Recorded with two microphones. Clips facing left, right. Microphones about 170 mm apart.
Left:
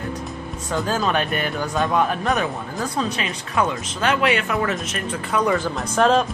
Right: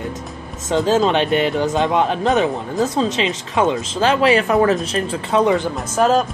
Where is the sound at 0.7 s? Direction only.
25° right (ahead or behind).